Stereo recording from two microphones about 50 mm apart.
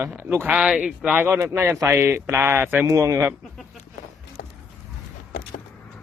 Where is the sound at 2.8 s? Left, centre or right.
Right.